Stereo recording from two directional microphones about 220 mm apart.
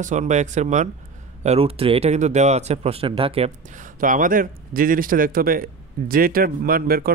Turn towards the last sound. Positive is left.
turn(degrees=-40)  # may be behind; listen again after turning